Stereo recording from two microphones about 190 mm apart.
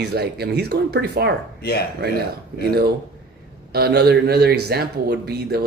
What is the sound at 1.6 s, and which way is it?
Speech, 55° left (ahead or behind).